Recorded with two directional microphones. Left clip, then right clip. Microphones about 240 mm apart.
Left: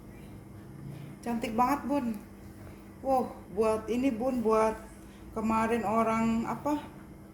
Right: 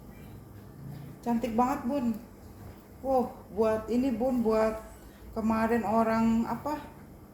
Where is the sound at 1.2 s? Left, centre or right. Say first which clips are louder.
Even; left.